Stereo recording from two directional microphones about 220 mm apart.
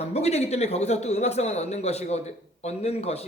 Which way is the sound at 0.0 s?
30° left (ahead or behind).